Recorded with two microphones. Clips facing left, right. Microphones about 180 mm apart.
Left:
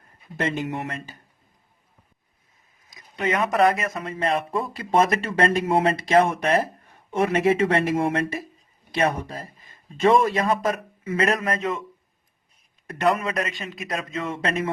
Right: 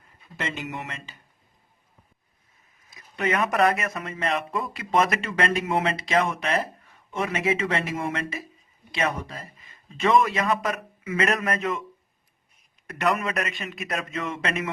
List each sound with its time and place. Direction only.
0.3 s speech: 50° left (ahead or behind)
2.9 s speech: 25° left (ahead or behind)
6.0 s speech: 50° left (ahead or behind)
10.1 s speech: 30° left (ahead or behind)
12.9 s speech: 30° left (ahead or behind)